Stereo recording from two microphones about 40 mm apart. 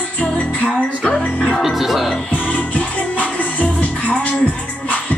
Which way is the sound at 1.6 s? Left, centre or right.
Centre.